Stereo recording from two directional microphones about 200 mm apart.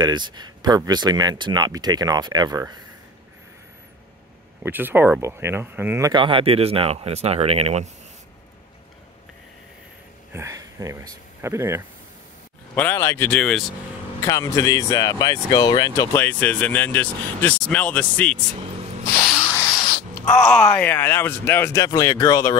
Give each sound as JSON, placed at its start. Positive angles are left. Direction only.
{"t": 0.0, "sound": "speech", "side_deg": -20}
{"t": 4.6, "sound": "speech", "side_deg": -10}
{"t": 10.3, "sound": "speech", "side_deg": -15}
{"t": 12.7, "sound": "speech", "side_deg": 10}
{"t": 14.2, "sound": "speech", "side_deg": 15}
{"t": 20.4, "sound": "speech", "side_deg": 5}